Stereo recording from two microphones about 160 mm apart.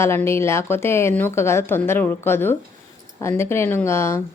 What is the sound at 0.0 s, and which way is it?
Speech, 15° left (ahead or behind).